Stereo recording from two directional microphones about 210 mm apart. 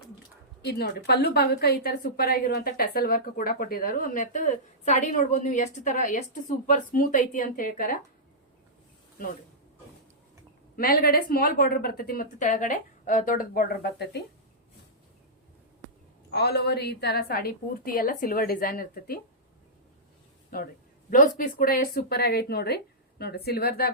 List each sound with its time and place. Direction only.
0.6 s a woman's voice: 50° left (ahead or behind)
10.8 s a woman's voice: 45° left (ahead or behind)
16.3 s a woman's voice: 50° left (ahead or behind)
20.5 s a woman's voice: 45° left (ahead or behind)